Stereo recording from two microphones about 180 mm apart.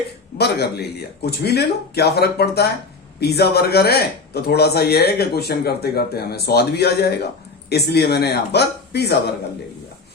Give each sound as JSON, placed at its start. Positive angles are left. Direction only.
{"t": 0.3, "sound": "speech", "side_deg": 65}